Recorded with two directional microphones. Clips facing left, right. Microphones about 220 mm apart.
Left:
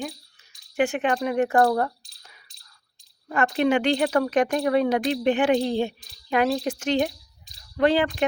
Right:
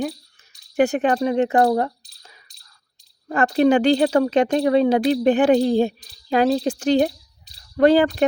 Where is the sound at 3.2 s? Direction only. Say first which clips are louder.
Right 5 dB; 40° right (ahead or behind).